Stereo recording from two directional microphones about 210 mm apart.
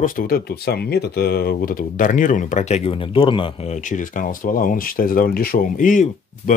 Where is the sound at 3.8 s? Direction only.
40° left (ahead or behind).